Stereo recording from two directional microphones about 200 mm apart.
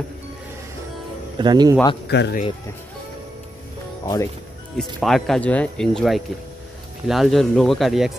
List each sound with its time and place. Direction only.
1.4 s speech: 20° right (ahead or behind)
2.0 s speech: 60° left (ahead or behind)
4.0 s speech: 20° left (ahead or behind)
4.7 s speech: centre (ahead or behind)